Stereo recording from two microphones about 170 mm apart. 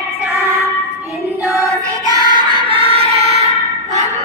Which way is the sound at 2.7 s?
35° right (ahead or behind).